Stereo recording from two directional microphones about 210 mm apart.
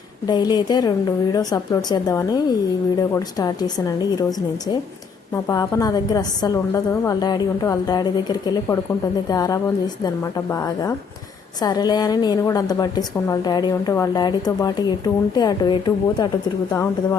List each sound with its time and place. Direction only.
0.3 s a woman's voice: 20° left (ahead or behind)